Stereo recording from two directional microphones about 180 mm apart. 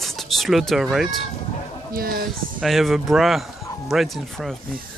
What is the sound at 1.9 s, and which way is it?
Speech, 55° right (ahead or behind).